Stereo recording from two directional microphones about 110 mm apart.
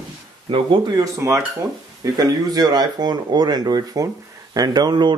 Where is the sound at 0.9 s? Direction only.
30° right (ahead or behind).